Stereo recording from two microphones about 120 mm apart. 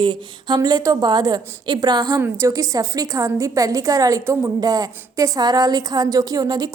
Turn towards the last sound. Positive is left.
turn(degrees=-35)  # may be behind; listen again after turning